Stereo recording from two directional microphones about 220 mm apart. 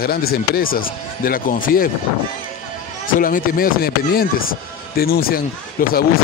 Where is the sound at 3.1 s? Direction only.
40° left (ahead or behind).